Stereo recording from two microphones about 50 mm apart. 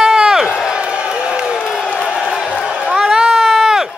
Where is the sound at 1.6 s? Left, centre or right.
Centre.